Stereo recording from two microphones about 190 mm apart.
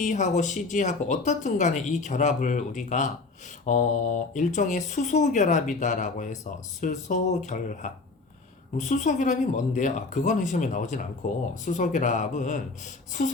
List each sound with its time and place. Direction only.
0.0 s speech: 40° left (ahead or behind)